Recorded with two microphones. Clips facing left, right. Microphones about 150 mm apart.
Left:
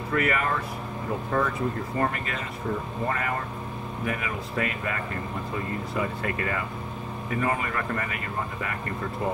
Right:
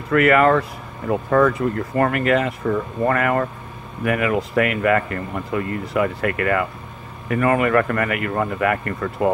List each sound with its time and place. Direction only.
0.1 s speech: 75° right (ahead or behind)